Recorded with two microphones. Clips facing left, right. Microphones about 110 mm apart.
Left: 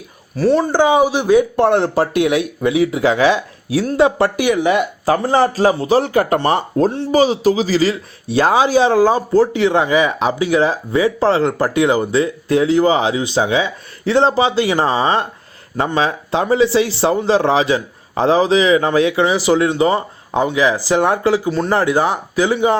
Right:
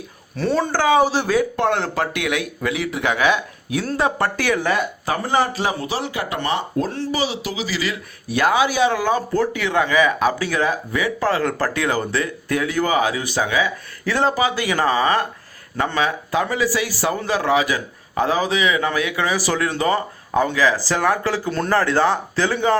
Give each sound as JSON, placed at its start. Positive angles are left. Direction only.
{"t": 0.5, "sound": "speech", "side_deg": 15}
{"t": 5.0, "sound": "a man's voice", "side_deg": 35}
{"t": 5.9, "sound": "speech", "side_deg": 45}